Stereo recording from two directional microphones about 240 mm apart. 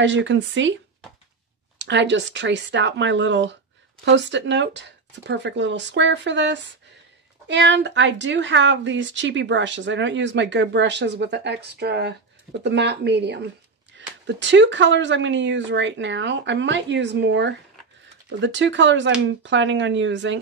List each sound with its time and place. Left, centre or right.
0.0 s a woman's voice: right
1.8 s a woman's voice: right